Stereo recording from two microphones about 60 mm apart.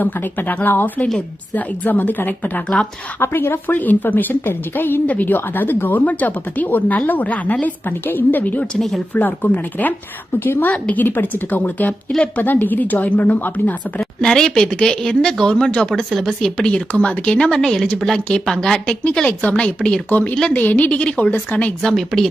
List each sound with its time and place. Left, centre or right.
0.0 s a woman's voice: left
3.2 s speech: left
3.7 s a woman's voice: left
14.0 s speech: centre
16.0 s speech: centre
16.6 s speech: centre
19.4 s a woman's voice: left
21.8 s speech: centre